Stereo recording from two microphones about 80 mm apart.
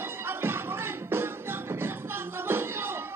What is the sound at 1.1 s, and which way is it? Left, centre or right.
Music, right.